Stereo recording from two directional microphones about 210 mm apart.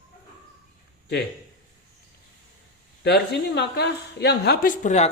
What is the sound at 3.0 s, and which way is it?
A woman's voice, 55° left (ahead or behind).